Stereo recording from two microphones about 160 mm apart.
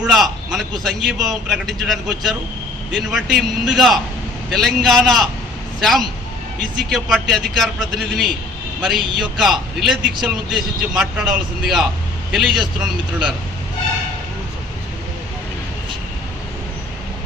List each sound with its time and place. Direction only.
0.0 s a man's voice: centre (ahead or behind)